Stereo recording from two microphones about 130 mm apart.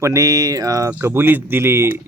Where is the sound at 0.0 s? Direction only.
25° right (ahead or behind).